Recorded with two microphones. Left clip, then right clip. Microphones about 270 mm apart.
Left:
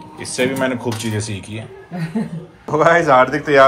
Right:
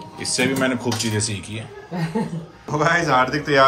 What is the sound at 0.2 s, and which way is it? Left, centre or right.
A man's voice, centre.